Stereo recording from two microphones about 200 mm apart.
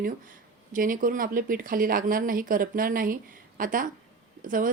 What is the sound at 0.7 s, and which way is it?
Speech, 45° right (ahead or behind).